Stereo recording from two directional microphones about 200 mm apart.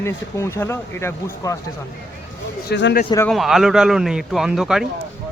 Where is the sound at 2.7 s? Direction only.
60° left (ahead or behind).